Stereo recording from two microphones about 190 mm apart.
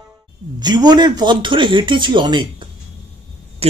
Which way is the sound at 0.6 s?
20° right (ahead or behind).